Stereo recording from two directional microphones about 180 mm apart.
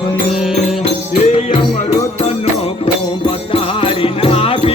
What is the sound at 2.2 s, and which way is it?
Music, 30° left (ahead or behind).